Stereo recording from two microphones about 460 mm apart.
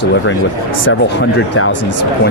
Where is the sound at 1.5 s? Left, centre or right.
Left.